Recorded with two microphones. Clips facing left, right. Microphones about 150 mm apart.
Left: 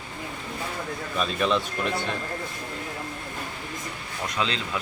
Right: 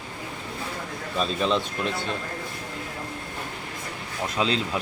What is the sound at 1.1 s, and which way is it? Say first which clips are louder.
Speech: right 1 dB; 30° right (ahead or behind).